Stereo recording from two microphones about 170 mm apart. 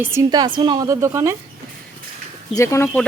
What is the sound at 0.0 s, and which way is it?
A woman's voice, 15° right (ahead or behind).